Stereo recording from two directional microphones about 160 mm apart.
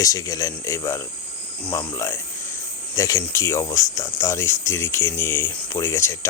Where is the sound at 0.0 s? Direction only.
20° left (ahead or behind).